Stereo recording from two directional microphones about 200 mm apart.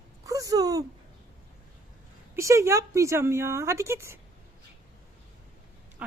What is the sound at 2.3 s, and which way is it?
A woman's voice, 15° right (ahead or behind).